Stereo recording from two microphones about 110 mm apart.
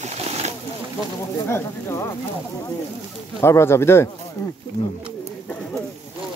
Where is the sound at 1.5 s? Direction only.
25° left (ahead or behind).